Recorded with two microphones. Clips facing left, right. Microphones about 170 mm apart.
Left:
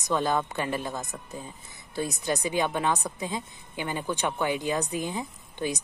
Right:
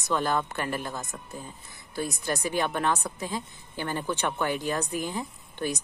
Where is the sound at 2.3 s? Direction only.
20° left (ahead or behind).